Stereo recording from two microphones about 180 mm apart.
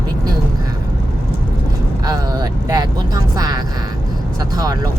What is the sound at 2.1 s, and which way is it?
Vehicle, 20° right (ahead or behind).